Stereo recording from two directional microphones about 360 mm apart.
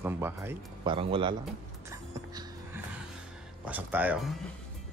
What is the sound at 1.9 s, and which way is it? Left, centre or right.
Music, centre.